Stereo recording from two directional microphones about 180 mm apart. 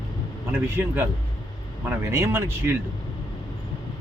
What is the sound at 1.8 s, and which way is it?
Speech, 15° right (ahead or behind).